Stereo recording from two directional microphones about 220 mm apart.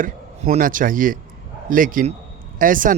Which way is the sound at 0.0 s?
35° right (ahead or behind).